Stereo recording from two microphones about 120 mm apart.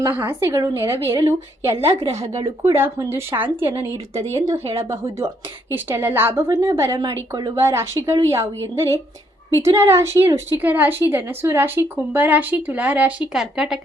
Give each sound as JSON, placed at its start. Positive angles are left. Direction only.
{"t": 0.0, "sound": "a woman's voice", "side_deg": -20}
{"t": 2.7, "sound": "a woman's voice", "side_deg": -20}
{"t": 4.8, "sound": "a woman's voice", "side_deg": -25}
{"t": 7.6, "sound": "a woman's voice", "side_deg": -20}